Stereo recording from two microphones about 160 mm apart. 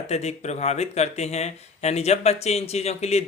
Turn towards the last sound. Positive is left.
turn(degrees=40)  # may be behind; listen again after turning